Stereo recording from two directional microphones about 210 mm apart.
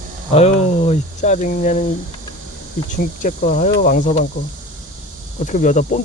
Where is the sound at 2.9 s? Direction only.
40° left (ahead or behind).